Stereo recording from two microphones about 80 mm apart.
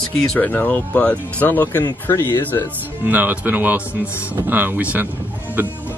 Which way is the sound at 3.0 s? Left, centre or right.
Right.